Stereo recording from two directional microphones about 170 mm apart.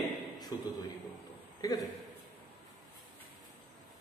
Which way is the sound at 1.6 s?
20° left (ahead or behind).